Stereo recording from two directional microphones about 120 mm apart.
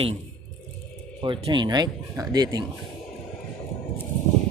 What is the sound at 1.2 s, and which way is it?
Speech, 45° right (ahead or behind).